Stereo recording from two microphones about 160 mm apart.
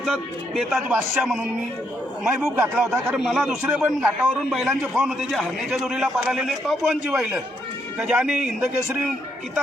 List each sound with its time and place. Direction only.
0.0 s a man's voice: centre (ahead or behind)